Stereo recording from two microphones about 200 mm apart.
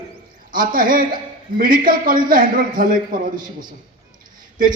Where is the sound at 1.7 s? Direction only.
45° right (ahead or behind).